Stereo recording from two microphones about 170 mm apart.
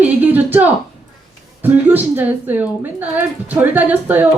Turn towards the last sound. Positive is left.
turn(degrees=-10)  # may be behind; listen again after turning